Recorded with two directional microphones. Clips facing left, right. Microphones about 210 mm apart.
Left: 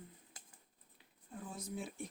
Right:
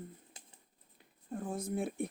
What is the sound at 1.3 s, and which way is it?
Speech, 50° right (ahead or behind).